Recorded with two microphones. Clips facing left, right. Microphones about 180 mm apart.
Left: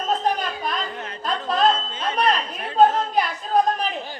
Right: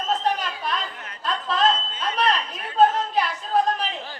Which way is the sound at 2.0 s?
30° left (ahead or behind).